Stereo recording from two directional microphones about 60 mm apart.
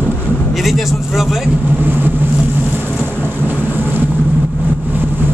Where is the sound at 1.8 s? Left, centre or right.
Right.